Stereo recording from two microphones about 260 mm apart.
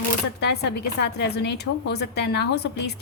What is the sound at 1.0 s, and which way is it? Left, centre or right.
A woman's voice, left.